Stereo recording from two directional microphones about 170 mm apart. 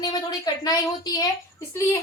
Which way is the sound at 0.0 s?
20° left (ahead or behind).